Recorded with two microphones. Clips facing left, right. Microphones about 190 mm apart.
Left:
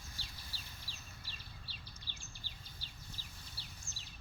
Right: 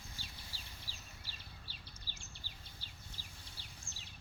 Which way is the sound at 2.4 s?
10° right (ahead or behind).